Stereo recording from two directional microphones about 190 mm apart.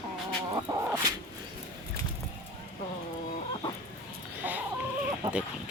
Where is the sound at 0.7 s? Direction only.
20° right (ahead or behind).